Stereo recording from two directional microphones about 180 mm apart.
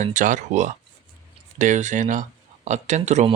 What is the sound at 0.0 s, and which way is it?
Speech, 45° right (ahead or behind).